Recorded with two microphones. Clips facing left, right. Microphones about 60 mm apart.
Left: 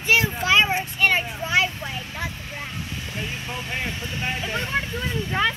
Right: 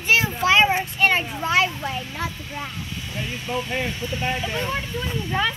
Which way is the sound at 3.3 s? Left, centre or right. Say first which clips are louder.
Right 4 dB; left.